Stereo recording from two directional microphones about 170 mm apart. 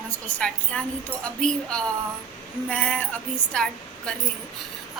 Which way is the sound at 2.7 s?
10° left (ahead or behind).